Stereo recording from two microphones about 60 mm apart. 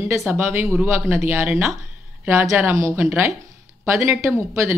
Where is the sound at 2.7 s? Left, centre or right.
Right.